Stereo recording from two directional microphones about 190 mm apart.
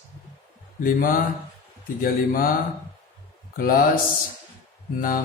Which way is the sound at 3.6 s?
50° left (ahead or behind).